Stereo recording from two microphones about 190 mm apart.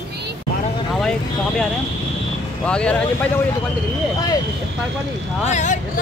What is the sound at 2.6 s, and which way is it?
Speech, 5° left (ahead or behind).